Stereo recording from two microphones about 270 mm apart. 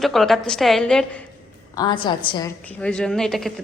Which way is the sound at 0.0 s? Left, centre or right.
Centre.